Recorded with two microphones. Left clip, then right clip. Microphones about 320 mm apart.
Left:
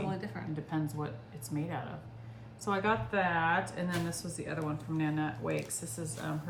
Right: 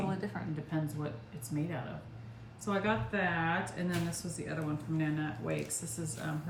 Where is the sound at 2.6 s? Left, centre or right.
Centre.